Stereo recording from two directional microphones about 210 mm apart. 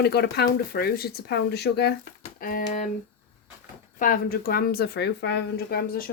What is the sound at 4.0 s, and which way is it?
A woman's voice, 40° left (ahead or behind).